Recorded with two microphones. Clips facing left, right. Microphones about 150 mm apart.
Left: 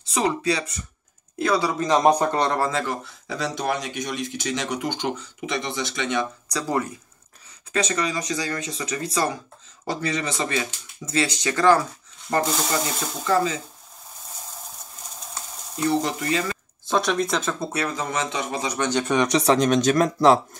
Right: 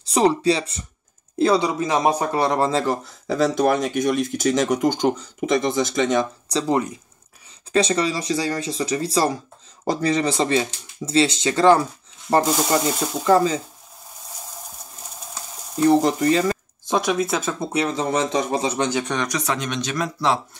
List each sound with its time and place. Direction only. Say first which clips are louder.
0.0 s speech: right 6 dB; 35° right (ahead or behind)
1.8 s speech: left 1 dB; 5° right (ahead or behind)
2.6 s speech: right 4 dB; 35° right (ahead or behind)
6.5 s speech: right 5 dB; 20° right (ahead or behind)
7.7 s speech: right 5 dB; 30° right (ahead or behind)
15.8 s speech: right 7 dB; 40° right (ahead or behind)
16.8 s speech: right 1 dB; 15° right (ahead or behind)
17.6 s speech: right 4 dB; 20° right (ahead or behind)
18.8 s speech: right 1 dB; 10° right (ahead or behind)
19.2 s speech: left 6 dB; 30° left (ahead or behind); by 20.3 s 45° left (ahead or behind)